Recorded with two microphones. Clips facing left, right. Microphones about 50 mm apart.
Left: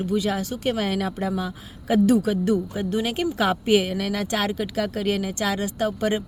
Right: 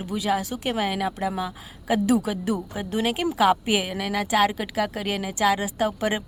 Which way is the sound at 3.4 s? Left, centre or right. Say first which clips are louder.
Left 1 dB; centre.